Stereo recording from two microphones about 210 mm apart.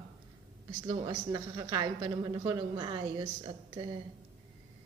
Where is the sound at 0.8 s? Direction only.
20° right (ahead or behind).